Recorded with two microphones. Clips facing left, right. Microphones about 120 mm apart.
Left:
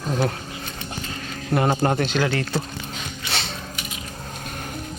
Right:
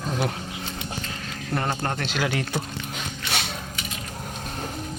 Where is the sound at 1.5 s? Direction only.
15° left (ahead or behind).